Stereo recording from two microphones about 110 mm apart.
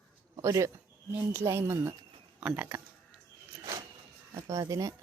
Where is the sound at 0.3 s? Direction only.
30° right (ahead or behind).